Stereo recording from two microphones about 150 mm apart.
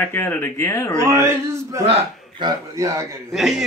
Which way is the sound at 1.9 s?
40° right (ahead or behind).